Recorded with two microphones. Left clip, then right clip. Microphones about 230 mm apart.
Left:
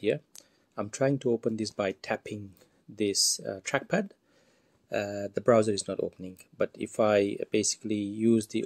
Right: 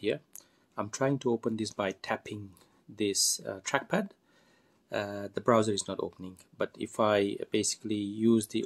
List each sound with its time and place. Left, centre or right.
0.7 s speech: centre